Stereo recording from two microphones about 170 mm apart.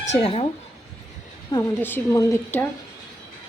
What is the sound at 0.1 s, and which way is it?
Speech, 35° left (ahead or behind).